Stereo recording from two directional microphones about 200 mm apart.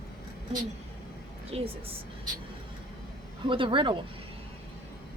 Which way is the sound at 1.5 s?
30° right (ahead or behind).